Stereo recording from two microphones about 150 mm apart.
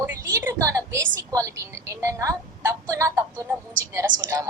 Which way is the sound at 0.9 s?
20° right (ahead or behind).